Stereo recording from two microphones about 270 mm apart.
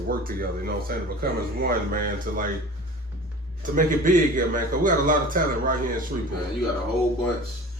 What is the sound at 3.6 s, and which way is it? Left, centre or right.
A man's voice, right.